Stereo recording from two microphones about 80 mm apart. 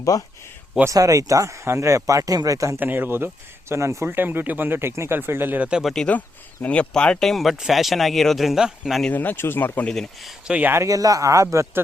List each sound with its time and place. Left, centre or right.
0.1 s speech: left
0.9 s speech: right
2.7 s speech: right
5.8 s speech: centre
6.1 s speech: centre
9.1 s speech: left
9.8 s speech: centre
10.4 s speech: centre
10.8 s speech: right